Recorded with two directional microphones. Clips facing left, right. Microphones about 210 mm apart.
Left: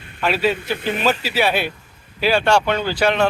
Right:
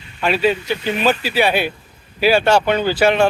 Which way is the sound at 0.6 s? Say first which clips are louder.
Right 2 dB; 55° left (ahead or behind).